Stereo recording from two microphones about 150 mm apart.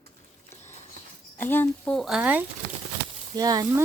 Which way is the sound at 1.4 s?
15° left (ahead or behind).